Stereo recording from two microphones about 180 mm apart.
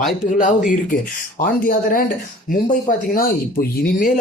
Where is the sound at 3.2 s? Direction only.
55° left (ahead or behind).